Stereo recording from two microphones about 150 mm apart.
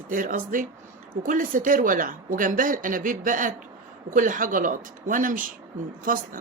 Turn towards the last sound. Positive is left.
turn(degrees=-65)  # may be behind; listen again after turning